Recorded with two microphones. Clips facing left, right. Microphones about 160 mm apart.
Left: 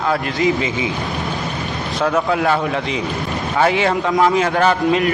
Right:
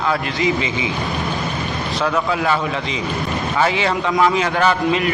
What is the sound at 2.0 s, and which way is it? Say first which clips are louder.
A man's voice: left 3 dB; 50° left (ahead or behind).